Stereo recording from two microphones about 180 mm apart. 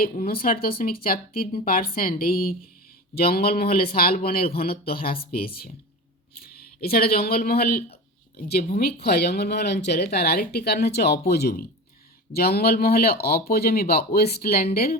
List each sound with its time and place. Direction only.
0.0 s speech: 55° left (ahead or behind)